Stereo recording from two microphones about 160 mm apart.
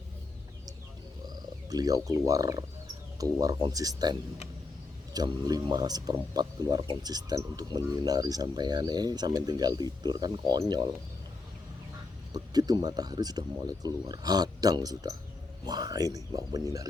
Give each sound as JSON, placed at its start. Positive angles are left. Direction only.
{"t": 1.7, "sound": "speech", "side_deg": -20}
{"t": 12.3, "sound": "speech", "side_deg": -25}